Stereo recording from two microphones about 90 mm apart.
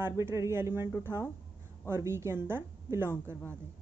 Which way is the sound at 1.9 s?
30° right (ahead or behind).